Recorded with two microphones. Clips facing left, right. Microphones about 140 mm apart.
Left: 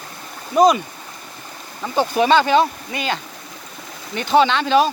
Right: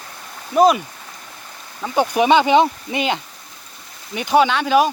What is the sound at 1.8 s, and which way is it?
Speech, 15° right (ahead or behind).